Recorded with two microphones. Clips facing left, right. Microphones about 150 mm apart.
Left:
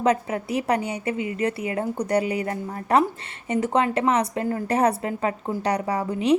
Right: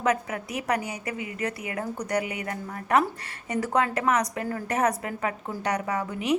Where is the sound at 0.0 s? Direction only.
30° left (ahead or behind).